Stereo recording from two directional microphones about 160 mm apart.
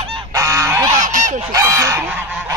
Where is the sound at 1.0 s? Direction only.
55° right (ahead or behind).